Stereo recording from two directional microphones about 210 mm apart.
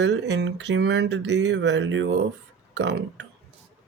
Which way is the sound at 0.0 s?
55° right (ahead or behind).